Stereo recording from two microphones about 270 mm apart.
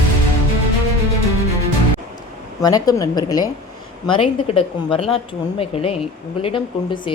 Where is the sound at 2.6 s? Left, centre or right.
Centre.